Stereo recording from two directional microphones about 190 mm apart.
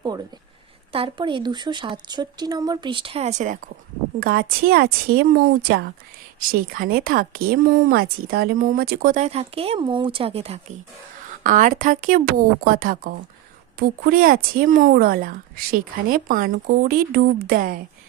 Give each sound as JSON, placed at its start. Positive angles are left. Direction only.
{"t": 0.9, "sound": "speech", "side_deg": -25}
{"t": 11.4, "sound": "speech", "side_deg": -45}